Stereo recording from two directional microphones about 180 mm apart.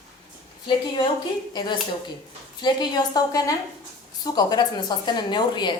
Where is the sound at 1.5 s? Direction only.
25° left (ahead or behind).